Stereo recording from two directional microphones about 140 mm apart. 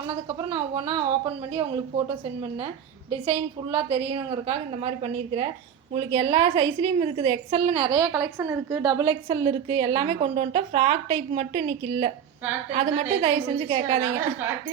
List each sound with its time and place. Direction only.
0.5 s a woman's voice: 35° right (ahead or behind)
3.1 s a woman's voice: 40° right (ahead or behind)
5.9 s a woman's voice: 45° right (ahead or behind)
8.1 s a woman's voice: 20° right (ahead or behind)
8.8 s a woman's voice: 30° right (ahead or behind)
9.3 s a woman's voice: 40° right (ahead or behind)